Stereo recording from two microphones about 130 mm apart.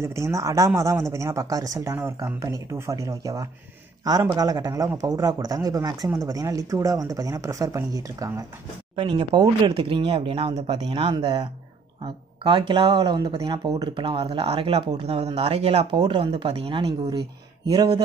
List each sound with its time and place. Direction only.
0.0 s a man's voice: 20° right (ahead or behind); by 10.8 s 50° right (ahead or behind)
10.9 s speech: 35° right (ahead or behind)
17.6 s speech: 30° right (ahead or behind)